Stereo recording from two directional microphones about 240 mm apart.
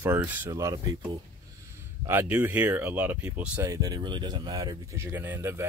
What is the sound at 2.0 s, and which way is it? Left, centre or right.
Speech, centre.